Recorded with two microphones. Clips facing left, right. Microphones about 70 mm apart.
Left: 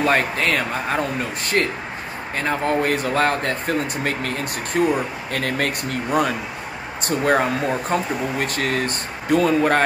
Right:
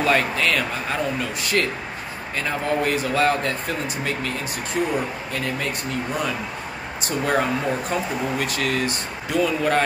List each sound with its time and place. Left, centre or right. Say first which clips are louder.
0.0 s speech: left 1 dB; left
5.3 s speech: left 6 dB; left